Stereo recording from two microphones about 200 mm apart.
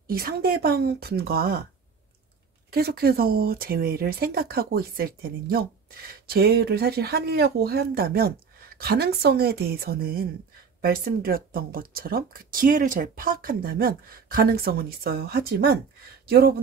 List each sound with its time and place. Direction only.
0.0 s speech: 50° right (ahead or behind)
2.7 s speech: 50° right (ahead or behind)